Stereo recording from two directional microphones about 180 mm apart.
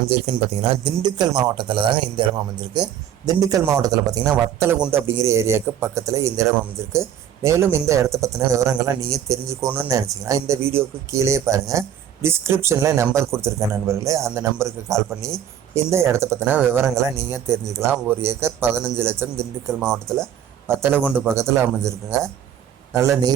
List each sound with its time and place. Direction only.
0.1 s speech: 35° right (ahead or behind)
0.9 s a man's voice: 25° right (ahead or behind)